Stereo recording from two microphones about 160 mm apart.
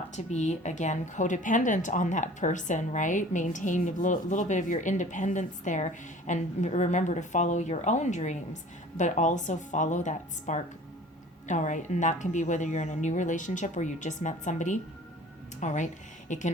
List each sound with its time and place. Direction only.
0.3 s a woman's voice: 45° left (ahead or behind)